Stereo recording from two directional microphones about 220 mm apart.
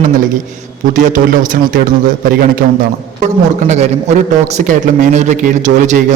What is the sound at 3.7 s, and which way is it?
A man's voice, 30° right (ahead or behind).